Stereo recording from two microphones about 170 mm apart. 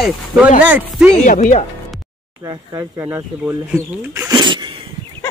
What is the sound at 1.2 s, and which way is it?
Speech, 45° left (ahead or behind).